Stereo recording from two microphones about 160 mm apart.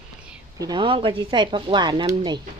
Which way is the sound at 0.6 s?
30° right (ahead or behind).